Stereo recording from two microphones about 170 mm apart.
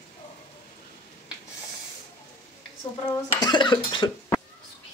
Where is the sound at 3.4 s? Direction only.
25° left (ahead or behind).